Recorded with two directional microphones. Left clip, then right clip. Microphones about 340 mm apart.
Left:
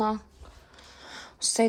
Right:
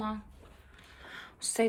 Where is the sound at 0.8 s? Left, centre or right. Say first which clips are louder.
Left 3 dB; centre.